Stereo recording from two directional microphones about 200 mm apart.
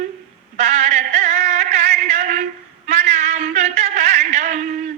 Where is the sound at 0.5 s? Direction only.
35° right (ahead or behind).